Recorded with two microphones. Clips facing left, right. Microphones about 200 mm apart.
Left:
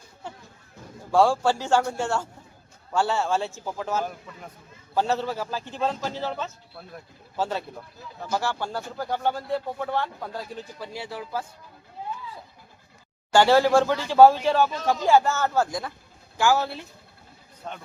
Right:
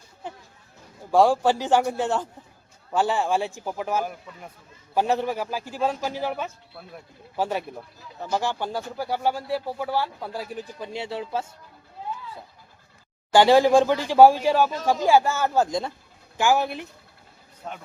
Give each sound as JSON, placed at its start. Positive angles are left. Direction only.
{"t": 0.2, "sound": "a sound", "side_deg": -15}
{"t": 1.1, "sound": "speech", "side_deg": -15}
{"t": 13.3, "sound": "speech", "side_deg": -15}
{"t": 17.6, "sound": "a man's voice", "side_deg": -5}